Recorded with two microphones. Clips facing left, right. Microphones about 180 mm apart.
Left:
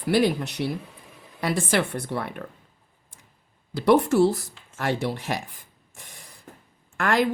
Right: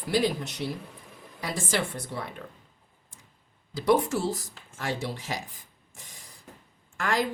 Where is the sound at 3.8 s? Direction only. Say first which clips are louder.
Left 6 dB; 65° left (ahead or behind).